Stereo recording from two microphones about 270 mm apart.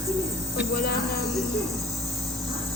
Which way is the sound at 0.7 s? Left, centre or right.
Left.